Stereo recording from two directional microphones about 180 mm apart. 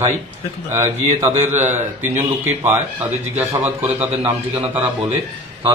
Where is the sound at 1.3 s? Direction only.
40° right (ahead or behind).